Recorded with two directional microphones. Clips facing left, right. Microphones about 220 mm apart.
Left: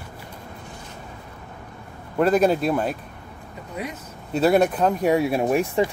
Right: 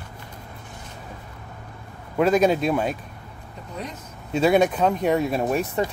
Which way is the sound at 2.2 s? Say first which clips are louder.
Even; 5° left (ahead or behind).